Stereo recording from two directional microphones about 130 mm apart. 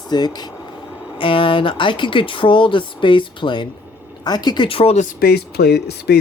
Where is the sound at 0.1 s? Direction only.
30° left (ahead or behind).